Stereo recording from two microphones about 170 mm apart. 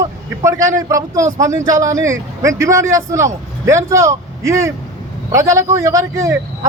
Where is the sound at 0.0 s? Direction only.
20° right (ahead or behind).